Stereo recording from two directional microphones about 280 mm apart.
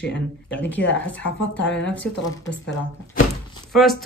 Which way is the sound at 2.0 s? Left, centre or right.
Left.